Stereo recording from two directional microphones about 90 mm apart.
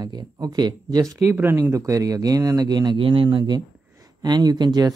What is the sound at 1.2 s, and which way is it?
Speech, 25° right (ahead or behind).